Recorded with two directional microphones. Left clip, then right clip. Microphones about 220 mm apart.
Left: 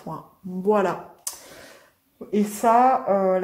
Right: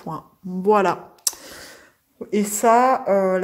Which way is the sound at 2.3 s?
40° right (ahead or behind).